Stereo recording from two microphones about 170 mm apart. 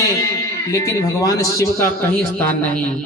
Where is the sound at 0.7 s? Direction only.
20° left (ahead or behind).